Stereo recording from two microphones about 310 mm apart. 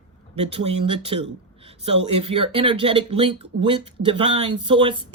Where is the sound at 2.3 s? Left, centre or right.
Centre.